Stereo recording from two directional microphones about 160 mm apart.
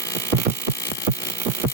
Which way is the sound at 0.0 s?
20° left (ahead or behind).